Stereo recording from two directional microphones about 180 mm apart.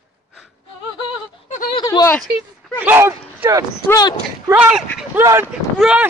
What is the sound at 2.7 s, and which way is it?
Speech, 10° right (ahead or behind).